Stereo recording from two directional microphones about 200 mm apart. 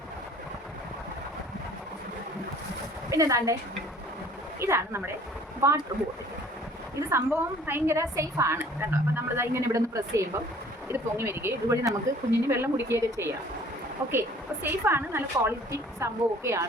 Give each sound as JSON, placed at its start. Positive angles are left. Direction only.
{"t": 3.1, "sound": "speech", "side_deg": -15}
{"t": 4.6, "sound": "a woman's voice", "side_deg": -15}
{"t": 7.1, "sound": "a woman's voice", "side_deg": -10}